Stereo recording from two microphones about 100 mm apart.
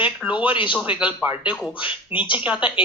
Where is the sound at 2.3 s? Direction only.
15° right (ahead or behind).